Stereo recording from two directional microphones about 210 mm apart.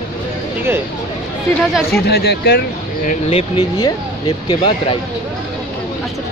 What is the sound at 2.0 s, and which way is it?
Speech, 50° left (ahead or behind).